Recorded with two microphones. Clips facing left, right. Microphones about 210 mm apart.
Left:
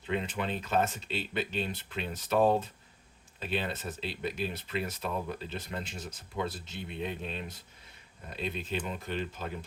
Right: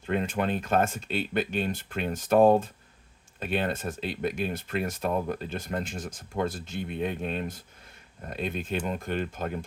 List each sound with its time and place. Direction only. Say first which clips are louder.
0.0 s speech: right 5 dB; 50° right (ahead or behind)